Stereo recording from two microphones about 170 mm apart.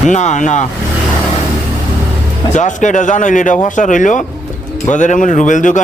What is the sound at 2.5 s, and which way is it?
A man's voice, 45° left (ahead or behind).